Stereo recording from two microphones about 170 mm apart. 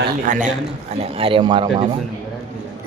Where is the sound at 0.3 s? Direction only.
50° right (ahead or behind); by 1.8 s 25° right (ahead or behind).